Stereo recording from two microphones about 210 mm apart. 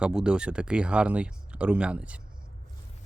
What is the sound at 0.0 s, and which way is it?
Speech, 5° right (ahead or behind).